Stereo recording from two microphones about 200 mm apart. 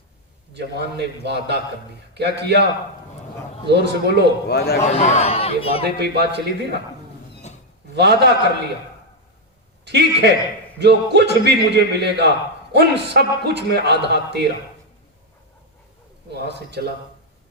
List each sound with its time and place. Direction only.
0.5 s a man's voice: 55° right (ahead or behind)
3.7 s a man's voice: 55° right (ahead or behind)
4.4 s a man's voice: 50° left (ahead or behind)
4.8 s a man's voice: 35° left (ahead or behind)
6.0 s a man's voice: 55° right (ahead or behind)
7.9 s a man's voice: 55° right (ahead or behind)
9.8 s a man's voice: 55° right (ahead or behind)
16.3 s a man's voice: 55° right (ahead or behind)